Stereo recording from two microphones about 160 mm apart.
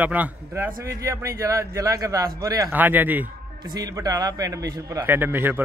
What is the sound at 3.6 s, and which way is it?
A man's voice, 25° right (ahead or behind).